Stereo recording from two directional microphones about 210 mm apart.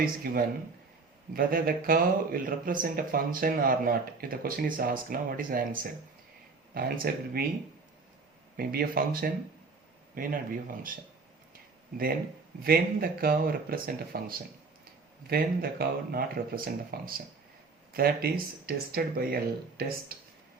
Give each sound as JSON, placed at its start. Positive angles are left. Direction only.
{"t": 0.2, "sound": "speech", "side_deg": -45}
{"t": 8.5, "sound": "speech", "side_deg": -45}
{"t": 12.6, "sound": "speech", "side_deg": -45}